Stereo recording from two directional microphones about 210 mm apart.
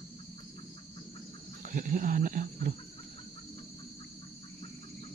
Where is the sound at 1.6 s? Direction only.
40° right (ahead or behind).